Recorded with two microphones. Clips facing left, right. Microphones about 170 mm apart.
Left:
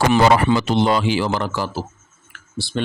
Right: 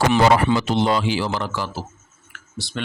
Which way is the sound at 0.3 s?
70° left (ahead or behind).